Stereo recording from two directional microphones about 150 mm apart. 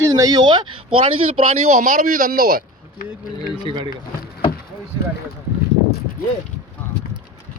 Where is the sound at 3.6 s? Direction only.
30° right (ahead or behind).